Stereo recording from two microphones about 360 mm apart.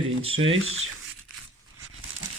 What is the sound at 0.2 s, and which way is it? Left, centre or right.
Speech, right.